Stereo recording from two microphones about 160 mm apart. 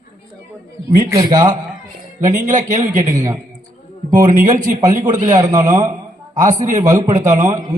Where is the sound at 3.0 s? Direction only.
20° right (ahead or behind).